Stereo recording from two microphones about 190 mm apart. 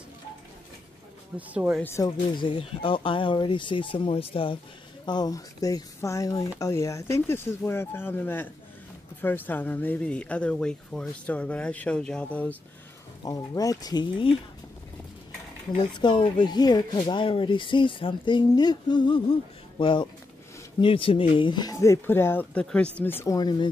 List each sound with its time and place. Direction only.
1.5 s speech: 5° right (ahead or behind)
1.8 s speech: 15° left (ahead or behind)
2.4 s speech: 25° left (ahead or behind); by 12.5 s 10° left (ahead or behind)
13.2 s speech: 20° left (ahead or behind)
15.7 s speech: 25° left (ahead or behind)